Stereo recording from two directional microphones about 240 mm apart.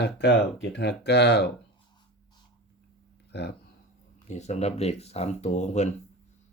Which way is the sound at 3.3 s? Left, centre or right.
Left.